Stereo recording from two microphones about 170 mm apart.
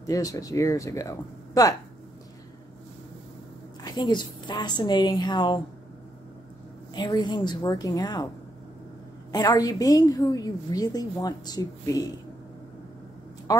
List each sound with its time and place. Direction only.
0.0 s a woman's voice: 20° left (ahead or behind)
3.8 s a woman's voice: 25° left (ahead or behind)
6.9 s a woman's voice: 25° left (ahead or behind)
9.3 s a woman's voice: 20° left (ahead or behind)
13.5 s speech: 20° left (ahead or behind)